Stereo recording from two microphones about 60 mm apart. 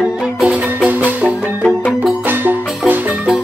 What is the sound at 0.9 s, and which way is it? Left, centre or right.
Music, right.